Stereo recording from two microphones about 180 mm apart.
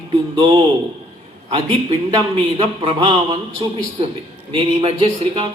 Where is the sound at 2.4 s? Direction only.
30° right (ahead or behind).